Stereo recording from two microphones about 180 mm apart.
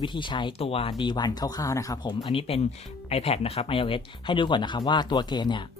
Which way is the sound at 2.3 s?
30° left (ahead or behind).